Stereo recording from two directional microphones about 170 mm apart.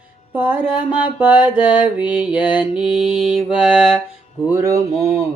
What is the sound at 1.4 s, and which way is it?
Mantra, 25° left (ahead or behind).